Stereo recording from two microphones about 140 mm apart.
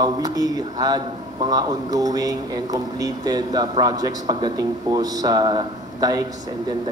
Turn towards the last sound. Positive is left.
turn(degrees=-30)  # may be behind; listen again after turning